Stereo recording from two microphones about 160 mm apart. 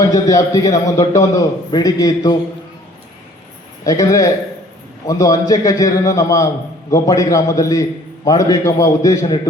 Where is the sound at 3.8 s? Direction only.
20° left (ahead or behind).